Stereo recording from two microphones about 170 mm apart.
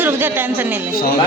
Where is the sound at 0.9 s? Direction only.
60° left (ahead or behind).